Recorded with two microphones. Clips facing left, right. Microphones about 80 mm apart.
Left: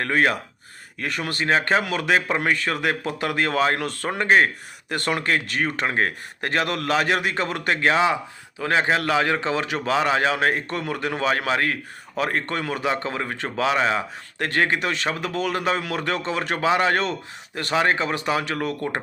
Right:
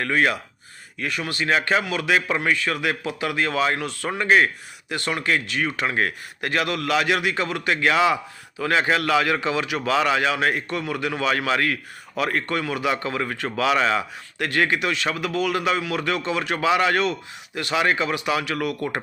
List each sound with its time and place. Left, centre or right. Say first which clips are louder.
0.0 s a man's voice: even; left
14.3 s a man's voice: even; left